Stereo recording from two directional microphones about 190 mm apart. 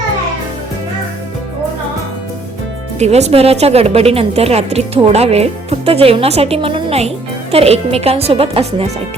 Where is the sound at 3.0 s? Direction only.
35° right (ahead or behind).